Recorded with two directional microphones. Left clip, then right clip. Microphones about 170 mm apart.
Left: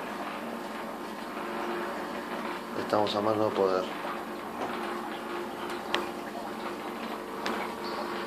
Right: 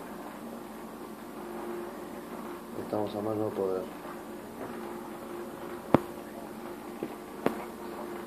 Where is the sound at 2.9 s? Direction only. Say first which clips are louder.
Left 6 dB; 30° left (ahead or behind).